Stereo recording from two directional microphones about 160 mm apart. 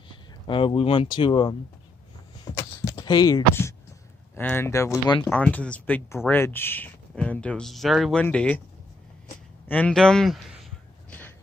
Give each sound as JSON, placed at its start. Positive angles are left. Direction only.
{"t": 0.5, "sound": "speech", "side_deg": 35}
{"t": 2.4, "sound": "clip-clop", "side_deg": 25}
{"t": 4.4, "sound": "speech", "side_deg": 15}
{"t": 9.7, "sound": "a sound", "side_deg": 10}